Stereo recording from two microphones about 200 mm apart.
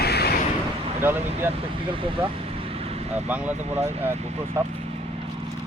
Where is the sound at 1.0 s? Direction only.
10° right (ahead or behind).